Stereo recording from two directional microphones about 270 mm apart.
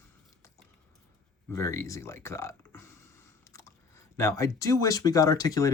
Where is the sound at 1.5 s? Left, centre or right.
Centre.